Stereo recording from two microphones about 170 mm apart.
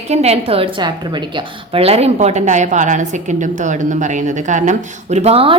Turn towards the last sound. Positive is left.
turn(degrees=-35)  # may be behind; listen again after turning